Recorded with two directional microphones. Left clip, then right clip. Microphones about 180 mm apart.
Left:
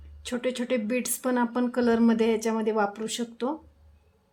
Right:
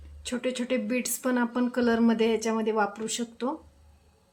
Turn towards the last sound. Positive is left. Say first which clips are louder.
# left 1 dB
turn(degrees=25)  # may be behind; listen again after turning